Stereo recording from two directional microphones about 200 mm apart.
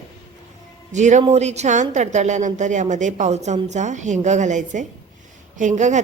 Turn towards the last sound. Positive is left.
turn(degrees=-35)  # may be behind; listen again after turning